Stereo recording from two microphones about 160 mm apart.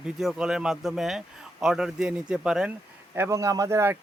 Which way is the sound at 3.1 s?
15° right (ahead or behind).